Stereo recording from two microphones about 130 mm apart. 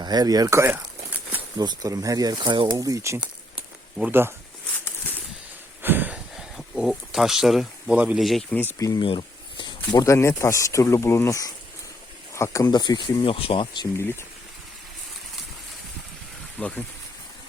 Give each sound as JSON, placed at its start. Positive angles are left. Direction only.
{"t": 0.0, "sound": "speech", "side_deg": -30}
{"t": 5.8, "sound": "a sound", "side_deg": -15}
{"t": 6.3, "sound": "a sound", "side_deg": 0}
{"t": 8.2, "sound": "speech", "side_deg": 0}
{"t": 8.8, "sound": "speech", "side_deg": 30}
{"t": 16.6, "sound": "speech", "side_deg": 10}